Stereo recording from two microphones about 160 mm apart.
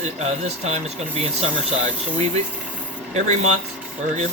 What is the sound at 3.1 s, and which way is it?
Speech, 45° right (ahead or behind).